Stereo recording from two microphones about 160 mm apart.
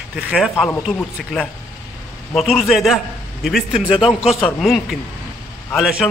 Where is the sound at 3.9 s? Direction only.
35° left (ahead or behind).